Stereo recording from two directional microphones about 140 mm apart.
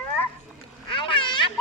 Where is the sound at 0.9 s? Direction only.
35° left (ahead or behind).